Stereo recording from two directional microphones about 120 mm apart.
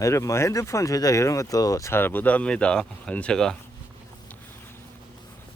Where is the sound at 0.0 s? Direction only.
25° left (ahead or behind); by 3.6 s 5° left (ahead or behind).